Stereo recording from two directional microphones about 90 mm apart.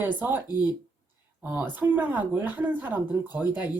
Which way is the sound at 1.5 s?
20° right (ahead or behind).